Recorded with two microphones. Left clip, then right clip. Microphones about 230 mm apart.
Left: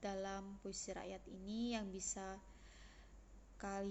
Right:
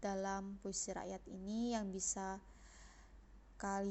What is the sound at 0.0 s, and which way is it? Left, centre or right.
A woman's voice, right.